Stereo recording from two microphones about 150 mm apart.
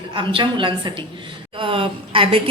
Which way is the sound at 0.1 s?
35° right (ahead or behind).